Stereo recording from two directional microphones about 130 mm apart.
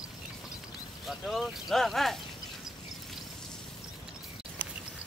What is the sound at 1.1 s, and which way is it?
Speech, centre (ahead or behind).